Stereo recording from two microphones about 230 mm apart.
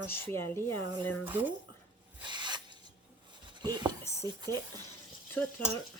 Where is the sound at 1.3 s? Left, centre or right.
Centre.